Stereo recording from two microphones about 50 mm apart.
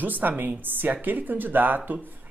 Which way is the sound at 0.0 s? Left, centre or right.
Right.